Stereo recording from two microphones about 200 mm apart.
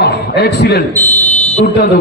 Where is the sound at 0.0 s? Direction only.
55° left (ahead or behind).